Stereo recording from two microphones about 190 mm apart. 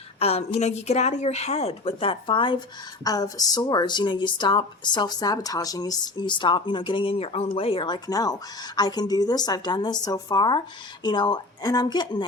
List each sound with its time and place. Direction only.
0.2 s speech: 35° left (ahead or behind)